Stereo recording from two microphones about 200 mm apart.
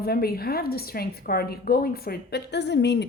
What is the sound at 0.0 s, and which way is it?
A woman's voice, 50° left (ahead or behind).